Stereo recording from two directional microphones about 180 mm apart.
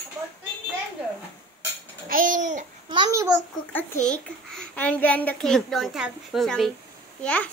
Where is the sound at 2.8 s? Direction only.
25° right (ahead or behind).